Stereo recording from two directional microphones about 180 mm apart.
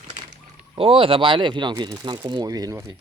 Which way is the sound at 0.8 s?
30° right (ahead or behind).